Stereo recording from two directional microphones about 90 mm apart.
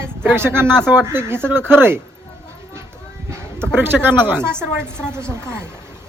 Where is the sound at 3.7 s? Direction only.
25° right (ahead or behind).